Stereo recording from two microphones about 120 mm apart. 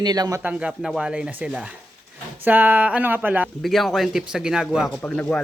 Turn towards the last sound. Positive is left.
turn(degrees=10)  # may be behind; listen again after turning